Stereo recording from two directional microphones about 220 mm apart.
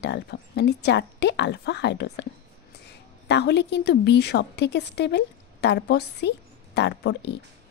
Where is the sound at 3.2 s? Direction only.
50° left (ahead or behind).